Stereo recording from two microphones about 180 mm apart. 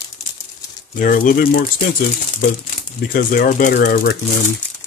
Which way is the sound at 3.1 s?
50° left (ahead or behind).